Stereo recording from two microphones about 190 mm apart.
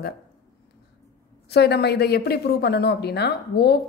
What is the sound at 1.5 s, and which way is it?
A woman's voice, 60° left (ahead or behind).